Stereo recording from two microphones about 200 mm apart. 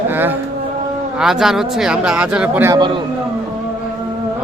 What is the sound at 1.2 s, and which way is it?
A man's voice, centre (ahead or behind).